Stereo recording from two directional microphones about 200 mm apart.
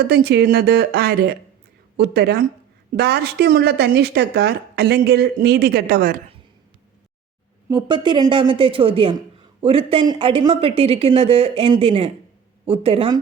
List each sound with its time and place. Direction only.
0.1 s speech: 55° right (ahead or behind)
7.7 s speech: 20° right (ahead or behind)